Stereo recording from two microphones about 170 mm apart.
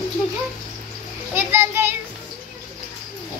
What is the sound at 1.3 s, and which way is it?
Speech, 15° right (ahead or behind).